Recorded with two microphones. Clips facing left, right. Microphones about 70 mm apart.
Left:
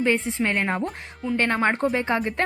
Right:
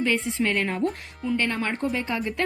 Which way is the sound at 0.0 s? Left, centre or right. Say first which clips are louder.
Left 2 dB; left.